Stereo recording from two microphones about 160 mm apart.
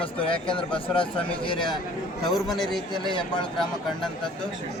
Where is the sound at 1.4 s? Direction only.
30° left (ahead or behind).